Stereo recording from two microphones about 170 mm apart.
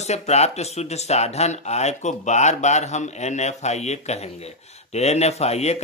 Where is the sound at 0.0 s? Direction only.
40° left (ahead or behind).